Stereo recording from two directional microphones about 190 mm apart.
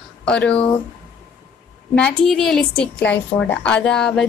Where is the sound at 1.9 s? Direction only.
5° left (ahead or behind).